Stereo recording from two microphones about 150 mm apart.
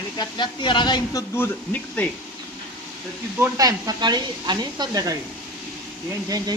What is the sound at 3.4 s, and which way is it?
Speech, 25° right (ahead or behind).